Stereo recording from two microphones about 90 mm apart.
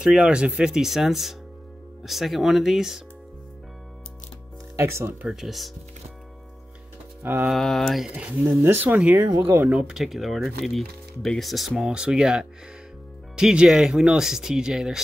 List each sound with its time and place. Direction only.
0.0 s speech: 10° right (ahead or behind)
4.7 s speech: 30° right (ahead or behind)
5.2 s speech: 5° right (ahead or behind)
7.4 s speech: 5° left (ahead or behind)
8.1 s speech: 15° right (ahead or behind)
9.8 s speech: 5° right (ahead or behind)